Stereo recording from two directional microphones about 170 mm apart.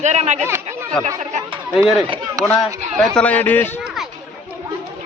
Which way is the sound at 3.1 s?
10° left (ahead or behind).